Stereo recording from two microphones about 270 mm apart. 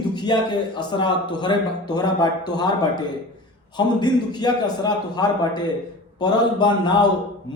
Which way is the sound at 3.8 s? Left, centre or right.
Centre.